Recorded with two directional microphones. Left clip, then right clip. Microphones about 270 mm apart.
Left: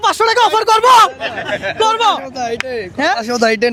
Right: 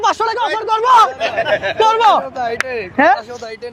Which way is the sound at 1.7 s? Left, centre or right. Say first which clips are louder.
Right 1 dB; centre.